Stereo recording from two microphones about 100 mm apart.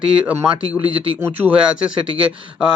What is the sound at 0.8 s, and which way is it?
Speech, 25° right (ahead or behind).